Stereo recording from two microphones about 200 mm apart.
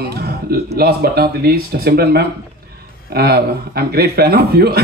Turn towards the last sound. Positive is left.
turn(degrees=-50)  # may be behind; listen again after turning